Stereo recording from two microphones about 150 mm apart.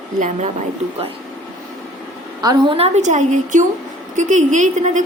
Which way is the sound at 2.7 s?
45° right (ahead or behind).